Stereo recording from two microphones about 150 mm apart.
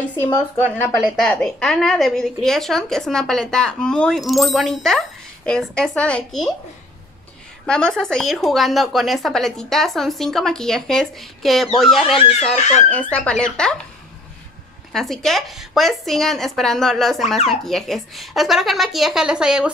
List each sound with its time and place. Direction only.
0.2 s a woman's voice: 10° left (ahead or behind)
0.9 s a woman's voice: centre (ahead or behind)
7.6 s a woman's voice: 5° left (ahead or behind)
12.2 s speech: 45° left (ahead or behind)
13.1 s a woman's voice: 5° left (ahead or behind)
14.9 s a woman's voice: centre (ahead or behind)